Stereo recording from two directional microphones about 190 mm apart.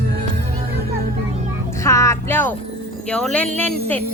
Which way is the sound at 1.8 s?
15° left (ahead or behind).